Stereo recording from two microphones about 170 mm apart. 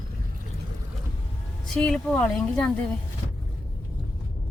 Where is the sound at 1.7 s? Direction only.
5° left (ahead or behind).